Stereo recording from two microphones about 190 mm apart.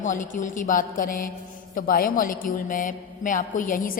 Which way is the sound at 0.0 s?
40° left (ahead or behind).